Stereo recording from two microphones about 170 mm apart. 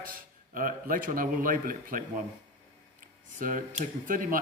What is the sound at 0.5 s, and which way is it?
Speech, 55° right (ahead or behind).